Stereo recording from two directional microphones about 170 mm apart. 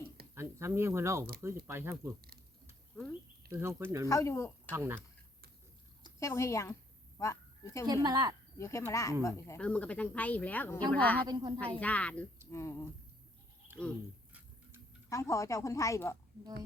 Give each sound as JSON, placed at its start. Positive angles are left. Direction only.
{"t": 0.3, "sound": "speech", "side_deg": -15}
{"t": 3.5, "sound": "speech", "side_deg": -15}
{"t": 4.1, "sound": "speech", "side_deg": 15}
{"t": 4.7, "sound": "speech", "side_deg": -15}
{"t": 6.1, "sound": "speech", "side_deg": 15}
{"t": 7.9, "sound": "speech", "side_deg": -25}
{"t": 8.5, "sound": "speech", "side_deg": 15}
{"t": 11.3, "sound": "speech", "side_deg": -20}
{"t": 11.6, "sound": "speech", "side_deg": 10}
{"t": 15.1, "sound": "speech", "side_deg": 15}